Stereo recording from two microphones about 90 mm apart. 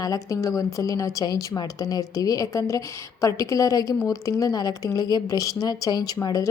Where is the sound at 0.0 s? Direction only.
40° left (ahead or behind).